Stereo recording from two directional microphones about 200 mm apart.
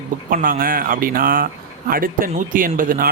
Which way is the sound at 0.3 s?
45° right (ahead or behind).